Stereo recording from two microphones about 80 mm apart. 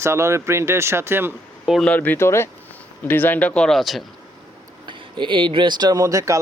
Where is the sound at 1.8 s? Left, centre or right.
Centre.